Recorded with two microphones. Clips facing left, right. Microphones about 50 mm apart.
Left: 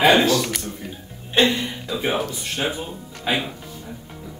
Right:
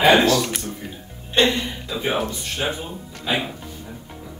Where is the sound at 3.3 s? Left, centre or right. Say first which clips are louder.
Left 1 dB; centre.